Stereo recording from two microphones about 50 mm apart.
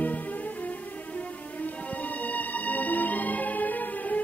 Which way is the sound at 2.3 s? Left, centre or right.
Left.